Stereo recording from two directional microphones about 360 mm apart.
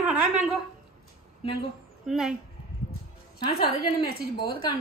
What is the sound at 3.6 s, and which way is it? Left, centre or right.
A woman's voice, left.